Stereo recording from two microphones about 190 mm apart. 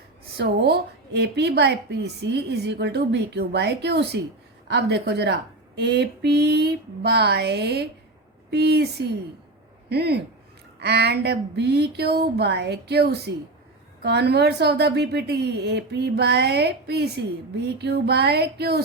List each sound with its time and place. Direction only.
0.3 s a woman's voice: 60° right (ahead or behind)